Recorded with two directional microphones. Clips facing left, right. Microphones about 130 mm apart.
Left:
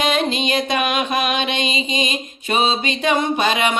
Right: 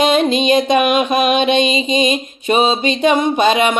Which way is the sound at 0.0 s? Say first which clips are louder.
Right 6 dB; 20° right (ahead or behind).